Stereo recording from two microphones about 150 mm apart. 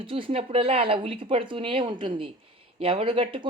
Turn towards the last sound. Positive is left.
turn(degrees=-35)  # may be behind; listen again after turning